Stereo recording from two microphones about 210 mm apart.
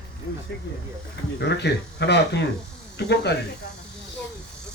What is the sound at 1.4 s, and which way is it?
Speech, 55° left (ahead or behind).